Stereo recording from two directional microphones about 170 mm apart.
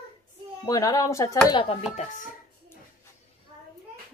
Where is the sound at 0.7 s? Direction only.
20° left (ahead or behind).